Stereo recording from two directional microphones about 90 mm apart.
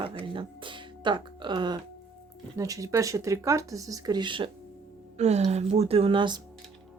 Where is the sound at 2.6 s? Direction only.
40° right (ahead or behind); by 4.4 s 60° right (ahead or behind).